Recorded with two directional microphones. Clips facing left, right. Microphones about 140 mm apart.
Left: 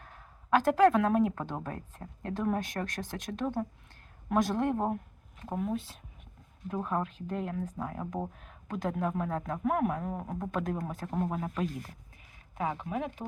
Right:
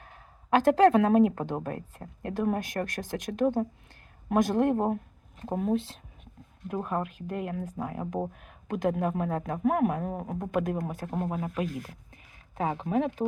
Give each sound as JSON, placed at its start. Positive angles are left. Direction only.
{"t": 0.5, "sound": "a woman's voice", "side_deg": -20}
{"t": 6.7, "sound": "speech", "side_deg": -15}
{"t": 11.0, "sound": "a woman's voice", "side_deg": -25}
{"t": 11.3, "sound": "speech", "side_deg": -5}
{"t": 12.5, "sound": "a woman's voice", "side_deg": -30}